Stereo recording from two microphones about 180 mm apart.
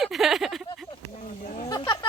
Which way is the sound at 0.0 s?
Centre (ahead or behind).